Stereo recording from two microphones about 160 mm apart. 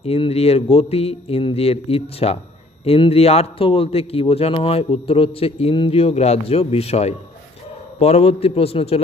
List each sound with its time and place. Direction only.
0.0 s a man's voice: 40° left (ahead or behind)